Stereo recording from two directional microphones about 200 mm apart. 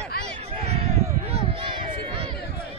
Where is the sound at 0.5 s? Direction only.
30° right (ahead or behind).